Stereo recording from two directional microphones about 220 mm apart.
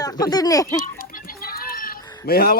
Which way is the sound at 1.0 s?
40° left (ahead or behind).